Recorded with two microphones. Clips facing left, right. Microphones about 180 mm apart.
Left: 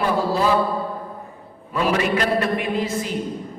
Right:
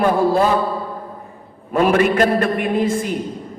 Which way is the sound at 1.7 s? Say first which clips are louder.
Right 6 dB; 50° right (ahead or behind).